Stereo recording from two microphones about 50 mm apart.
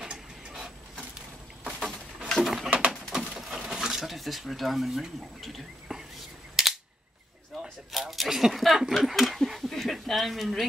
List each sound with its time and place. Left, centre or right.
0.0 s printer: centre
1.6 s a sound: centre
2.4 s bird: centre
3.3 s dishes: centre
6.6 s cap gun: centre
7.6 s a sound: centre